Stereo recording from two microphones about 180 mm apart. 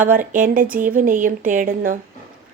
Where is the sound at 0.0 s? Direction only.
50° right (ahead or behind).